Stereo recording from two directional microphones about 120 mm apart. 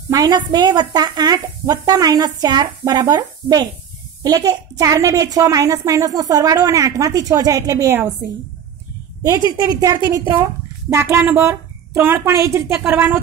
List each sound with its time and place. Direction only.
0.1 s a woman's voice: 30° right (ahead or behind)
9.2 s a woman's voice: 30° right (ahead or behind)